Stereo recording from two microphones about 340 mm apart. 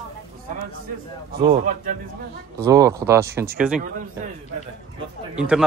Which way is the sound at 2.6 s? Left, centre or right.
Centre.